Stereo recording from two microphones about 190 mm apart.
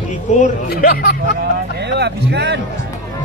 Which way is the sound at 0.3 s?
40° left (ahead or behind).